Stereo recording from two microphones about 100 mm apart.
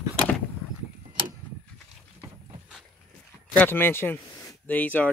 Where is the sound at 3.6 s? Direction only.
20° left (ahead or behind).